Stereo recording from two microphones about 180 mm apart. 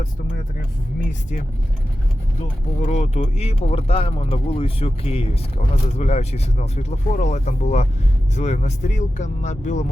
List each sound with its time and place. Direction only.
2.8 s speech: 40° left (ahead or behind)